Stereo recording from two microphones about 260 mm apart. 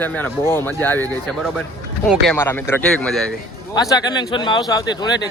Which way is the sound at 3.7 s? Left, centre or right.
Centre.